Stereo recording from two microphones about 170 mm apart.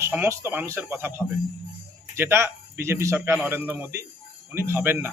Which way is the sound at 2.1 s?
15° right (ahead or behind).